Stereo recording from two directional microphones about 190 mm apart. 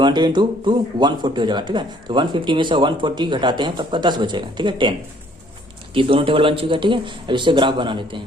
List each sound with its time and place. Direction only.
0.0 s speech: 25° right (ahead or behind)